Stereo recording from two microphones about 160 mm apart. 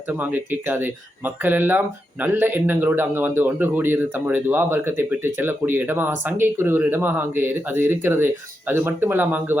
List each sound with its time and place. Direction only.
0.1 s a man's voice: 10° right (ahead or behind)